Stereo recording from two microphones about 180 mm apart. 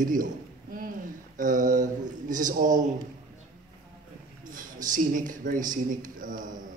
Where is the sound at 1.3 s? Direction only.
45° right (ahead or behind).